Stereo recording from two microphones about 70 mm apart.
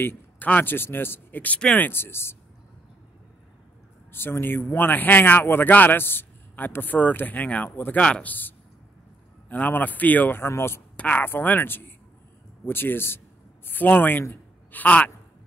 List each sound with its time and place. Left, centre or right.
0.0 s a sound: left
0.5 s speech: left
1.9 s a man's voice: left
4.1 s speech: left
11.0 s a man's voice: left
14.3 s a sound: left